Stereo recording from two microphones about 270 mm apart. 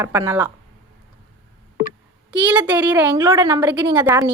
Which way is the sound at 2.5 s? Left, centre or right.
Centre.